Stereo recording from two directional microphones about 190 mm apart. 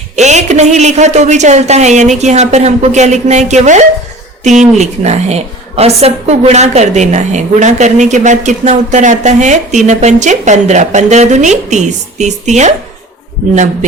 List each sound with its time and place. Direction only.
0.2 s a woman's voice: 40° right (ahead or behind)